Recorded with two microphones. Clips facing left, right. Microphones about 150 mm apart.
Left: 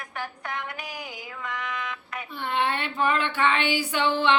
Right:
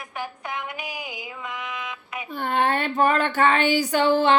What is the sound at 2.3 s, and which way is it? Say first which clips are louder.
Speech: right 4 dB; 45° right (ahead or behind).